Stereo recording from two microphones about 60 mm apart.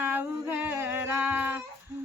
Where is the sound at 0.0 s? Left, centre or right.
Right.